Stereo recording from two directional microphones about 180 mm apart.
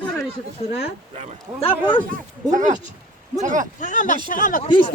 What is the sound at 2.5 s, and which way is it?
Speech, 45° right (ahead or behind).